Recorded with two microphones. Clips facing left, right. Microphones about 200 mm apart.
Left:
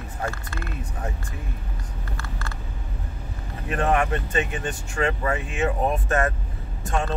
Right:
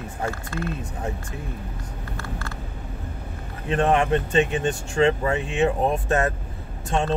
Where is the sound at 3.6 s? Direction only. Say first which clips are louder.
Right 3 dB; 25° right (ahead or behind).